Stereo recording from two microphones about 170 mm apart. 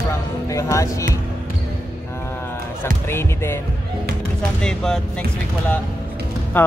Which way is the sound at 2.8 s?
15° left (ahead or behind).